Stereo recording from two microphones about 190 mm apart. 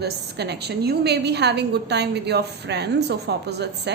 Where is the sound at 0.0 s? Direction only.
60° right (ahead or behind).